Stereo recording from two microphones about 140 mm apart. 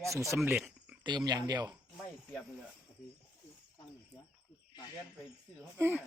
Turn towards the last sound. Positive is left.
turn(degrees=-15)  # may be behind; listen again after turning